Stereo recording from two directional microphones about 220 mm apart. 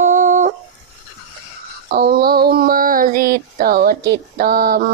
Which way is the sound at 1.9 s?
45° right (ahead or behind).